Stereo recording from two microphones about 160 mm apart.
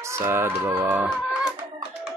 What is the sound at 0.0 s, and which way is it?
Speech, 15° right (ahead or behind).